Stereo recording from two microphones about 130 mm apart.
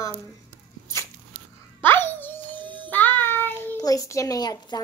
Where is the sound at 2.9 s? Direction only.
15° left (ahead or behind).